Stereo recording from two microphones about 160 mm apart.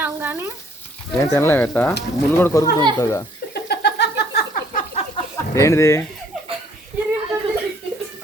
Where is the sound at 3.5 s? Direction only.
90° left.